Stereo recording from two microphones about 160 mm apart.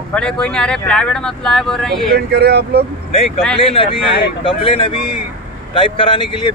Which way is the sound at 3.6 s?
35° left (ahead or behind).